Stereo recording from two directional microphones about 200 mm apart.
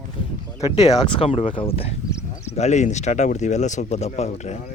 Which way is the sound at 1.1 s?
25° left (ahead or behind).